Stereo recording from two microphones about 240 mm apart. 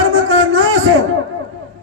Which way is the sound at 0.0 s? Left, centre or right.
Right.